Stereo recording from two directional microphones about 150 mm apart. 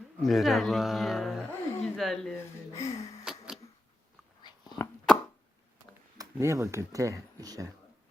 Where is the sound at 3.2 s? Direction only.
5° right (ahead or behind).